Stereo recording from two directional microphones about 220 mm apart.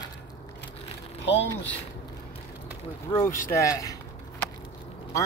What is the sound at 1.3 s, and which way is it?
Speech, 55° left (ahead or behind).